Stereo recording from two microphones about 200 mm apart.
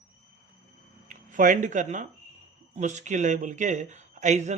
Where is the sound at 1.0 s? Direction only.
40° right (ahead or behind).